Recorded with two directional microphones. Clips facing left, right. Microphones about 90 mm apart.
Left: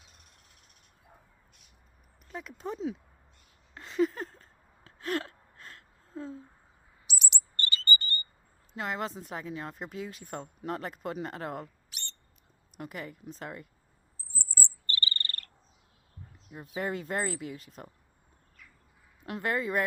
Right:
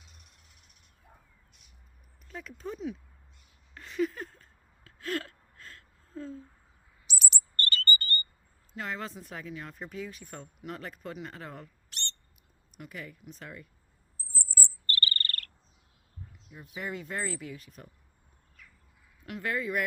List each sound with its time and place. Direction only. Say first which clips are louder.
2.2 s speech: left 2 dB; 20° left (ahead or behind)
3.8 s a sound: left 3 dB; 30° left (ahead or behind)
7.1 s chirp: right 1 dB; 15° left (ahead or behind)
7.9 s a sound: left 3 dB; 20° left (ahead or behind)
8.7 s speech: left 3 dB; 30° left (ahead or behind)
11.9 s bird: right 6 dB; 5° left (ahead or behind)
12.7 s speech: left 3 dB; 35° left (ahead or behind)
14.8 s bird: right 2 dB; 20° left (ahead or behind)
16.3 s speech: left 6 dB; 35° left (ahead or behind)
19.2 s speech: left 2 dB; 35° left (ahead or behind)